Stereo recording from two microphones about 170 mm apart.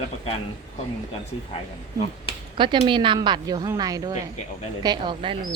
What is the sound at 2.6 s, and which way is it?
Speech, 30° right (ahead or behind).